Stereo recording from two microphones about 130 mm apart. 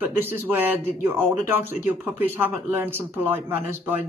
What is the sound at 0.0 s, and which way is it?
Speech, 15° right (ahead or behind).